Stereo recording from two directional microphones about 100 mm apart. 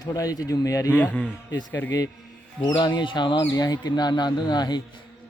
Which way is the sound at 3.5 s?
40° left (ahead or behind).